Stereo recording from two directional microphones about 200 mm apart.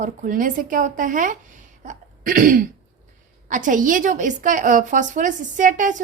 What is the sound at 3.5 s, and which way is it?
A woman's voice, 40° right (ahead or behind).